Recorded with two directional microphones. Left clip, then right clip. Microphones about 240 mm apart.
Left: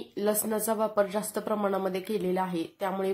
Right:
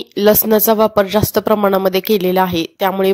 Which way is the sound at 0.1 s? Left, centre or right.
Right.